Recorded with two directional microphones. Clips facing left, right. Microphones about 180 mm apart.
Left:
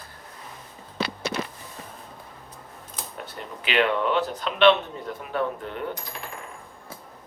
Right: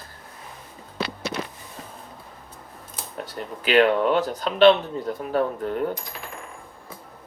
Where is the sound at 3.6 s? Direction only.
40° right (ahead or behind).